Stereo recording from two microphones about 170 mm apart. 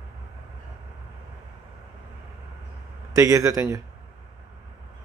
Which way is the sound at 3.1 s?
20° right (ahead or behind).